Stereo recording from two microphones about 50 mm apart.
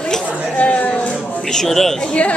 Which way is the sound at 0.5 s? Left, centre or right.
Left.